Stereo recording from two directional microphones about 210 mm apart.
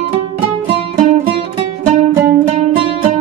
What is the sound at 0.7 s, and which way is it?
Music, 30° right (ahead or behind).